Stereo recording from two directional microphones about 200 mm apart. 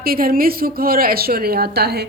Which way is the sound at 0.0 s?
45° right (ahead or behind).